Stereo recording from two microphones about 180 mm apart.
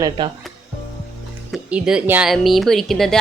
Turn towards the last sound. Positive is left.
turn(degrees=0)  # may be behind; listen again after turning